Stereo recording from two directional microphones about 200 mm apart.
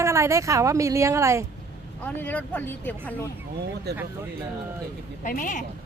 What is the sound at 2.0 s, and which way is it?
Speech, 10° left (ahead or behind).